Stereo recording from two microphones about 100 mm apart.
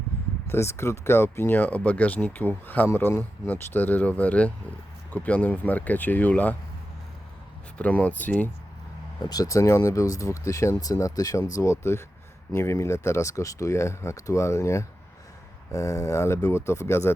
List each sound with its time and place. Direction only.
0.4 s speech: 25° left (ahead or behind)
7.8 s speech: 15° left (ahead or behind)
9.3 s speech: 35° left (ahead or behind)